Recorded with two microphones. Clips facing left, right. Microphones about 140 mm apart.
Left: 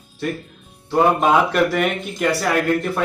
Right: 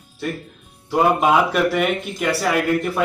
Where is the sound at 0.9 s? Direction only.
5° right (ahead or behind).